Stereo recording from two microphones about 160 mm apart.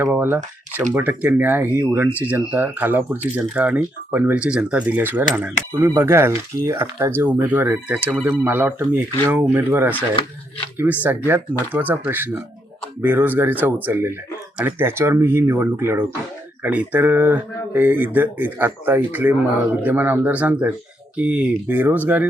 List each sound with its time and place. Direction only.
0.0 s speech: 15° right (ahead or behind)